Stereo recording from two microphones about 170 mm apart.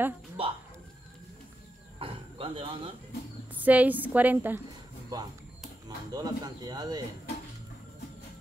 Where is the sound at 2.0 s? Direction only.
30° right (ahead or behind).